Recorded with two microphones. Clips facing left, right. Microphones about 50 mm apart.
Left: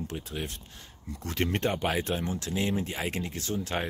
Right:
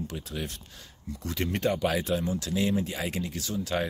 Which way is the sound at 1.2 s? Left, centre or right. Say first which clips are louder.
Even; left.